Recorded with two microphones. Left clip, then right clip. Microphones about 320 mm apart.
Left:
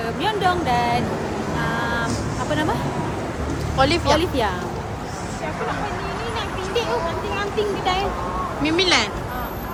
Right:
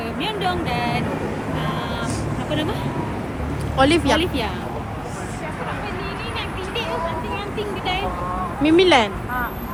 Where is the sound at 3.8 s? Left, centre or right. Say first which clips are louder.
Right 1 dB; right.